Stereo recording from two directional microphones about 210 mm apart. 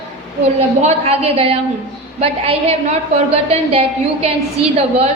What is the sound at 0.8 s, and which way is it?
A woman's voice, 30° right (ahead or behind).